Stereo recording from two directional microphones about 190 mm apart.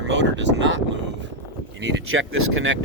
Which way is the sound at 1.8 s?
90° right.